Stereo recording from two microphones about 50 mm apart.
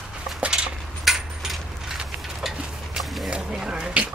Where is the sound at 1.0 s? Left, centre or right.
Centre.